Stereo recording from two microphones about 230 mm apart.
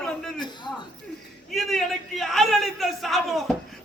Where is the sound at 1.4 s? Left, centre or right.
Centre.